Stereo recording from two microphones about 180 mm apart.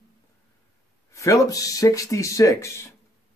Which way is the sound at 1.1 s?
15° left (ahead or behind).